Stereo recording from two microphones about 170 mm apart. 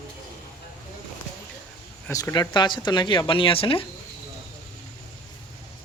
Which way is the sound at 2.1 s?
20° left (ahead or behind).